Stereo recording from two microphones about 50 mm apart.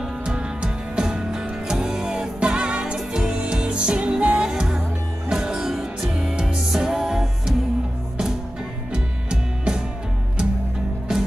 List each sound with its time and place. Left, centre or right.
0.2 s music: centre
8.9 s music: centre
11.1 s music: centre